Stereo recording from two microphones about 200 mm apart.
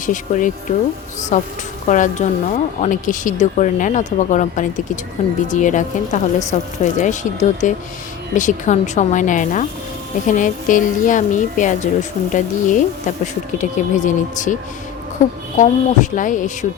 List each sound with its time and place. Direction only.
0.0 s speech: 40° left (ahead or behind)
15.5 s speech: 40° left (ahead or behind)